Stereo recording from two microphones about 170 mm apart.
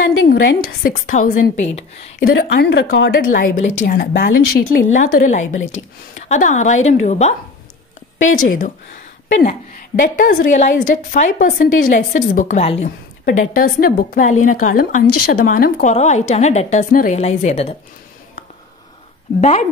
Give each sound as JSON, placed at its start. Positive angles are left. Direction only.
{"t": 0.8, "sound": "a woman's voice", "side_deg": 50}
{"t": 2.2, "sound": "a woman's voice", "side_deg": 80}
{"t": 9.3, "sound": "a woman's voice", "side_deg": 35}
{"t": 9.7, "sound": "a woman's voice", "side_deg": 55}
{"t": 13.2, "sound": "a woman's voice", "side_deg": 55}